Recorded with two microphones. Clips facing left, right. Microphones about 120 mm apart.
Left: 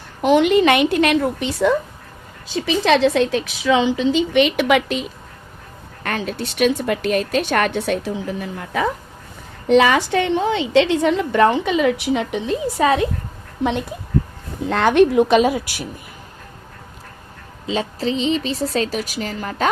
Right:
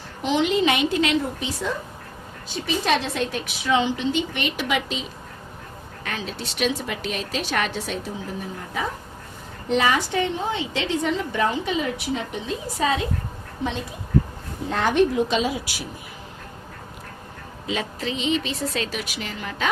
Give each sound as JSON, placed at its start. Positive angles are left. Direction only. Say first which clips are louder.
{"t": 0.2, "sound": "a woman's voice", "louder": "left 7 dB", "side_deg": 55}
{"t": 2.6, "sound": "a woman's voice", "louder": "left 7 dB", "side_deg": 90}
{"t": 4.4, "sound": "a woman's voice", "louder": "left 10 dB", "side_deg": 70}
{"t": 14.7, "sound": "a woman's voice", "louder": "left 6 dB", "side_deg": 75}
{"t": 17.7, "sound": "a woman's voice", "louder": "left 6 dB", "side_deg": 30}